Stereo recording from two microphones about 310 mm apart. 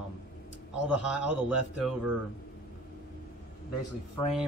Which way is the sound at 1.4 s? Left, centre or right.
Centre.